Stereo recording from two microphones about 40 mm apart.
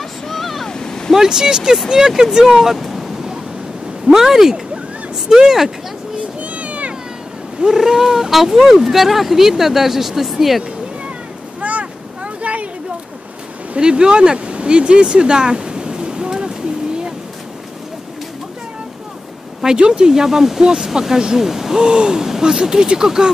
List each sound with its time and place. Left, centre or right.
0.3 s waves: centre
0.7 s a sound: centre
1.1 s speech: centre
4.1 s speech: centre
6.4 s a sound: right
7.6 s speech: centre
11.6 s boat: right
13.7 s speech: right
19.8 s speech: centre